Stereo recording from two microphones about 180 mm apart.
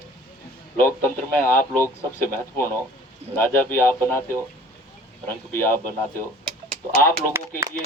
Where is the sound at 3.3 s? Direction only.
10° left (ahead or behind).